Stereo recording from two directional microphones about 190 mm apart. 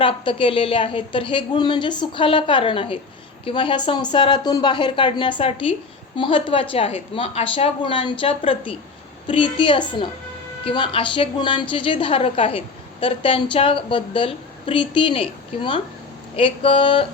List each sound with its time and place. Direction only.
0.0 s a woman's voice: 25° left (ahead or behind)